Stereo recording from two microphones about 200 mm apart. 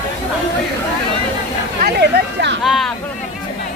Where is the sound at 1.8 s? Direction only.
55° right (ahead or behind).